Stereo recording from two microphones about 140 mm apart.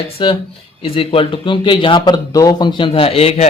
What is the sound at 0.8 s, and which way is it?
Speech, 40° left (ahead or behind).